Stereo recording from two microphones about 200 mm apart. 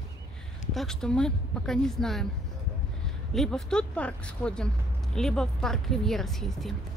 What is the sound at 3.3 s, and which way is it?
Speech, centre (ahead or behind).